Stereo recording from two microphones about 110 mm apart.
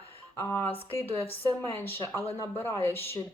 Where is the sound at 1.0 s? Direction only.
60° left (ahead or behind).